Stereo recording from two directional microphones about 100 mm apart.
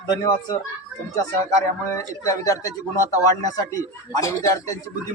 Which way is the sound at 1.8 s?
30° left (ahead or behind).